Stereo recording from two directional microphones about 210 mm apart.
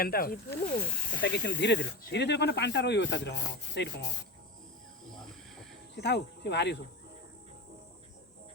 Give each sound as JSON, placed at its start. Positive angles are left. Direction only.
{"t": 0.0, "sound": "speech", "side_deg": 45}
{"t": 1.2, "sound": "speech", "side_deg": 55}
{"t": 5.1, "sound": "a sound", "side_deg": 0}
{"t": 5.9, "sound": "speech", "side_deg": 55}